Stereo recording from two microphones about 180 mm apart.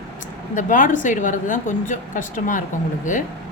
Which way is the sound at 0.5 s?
45° left (ahead or behind).